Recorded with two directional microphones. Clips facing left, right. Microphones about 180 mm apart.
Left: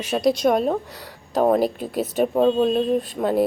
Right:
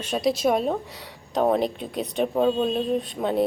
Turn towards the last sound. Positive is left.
turn(degrees=0)  # may be behind; listen again after turning